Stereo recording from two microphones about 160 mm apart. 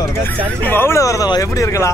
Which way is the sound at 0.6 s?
15° left (ahead or behind).